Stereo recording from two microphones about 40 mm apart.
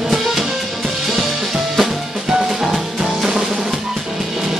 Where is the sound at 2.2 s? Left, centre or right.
Centre.